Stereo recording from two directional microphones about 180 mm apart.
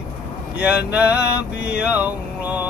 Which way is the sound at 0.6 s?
5° right (ahead or behind).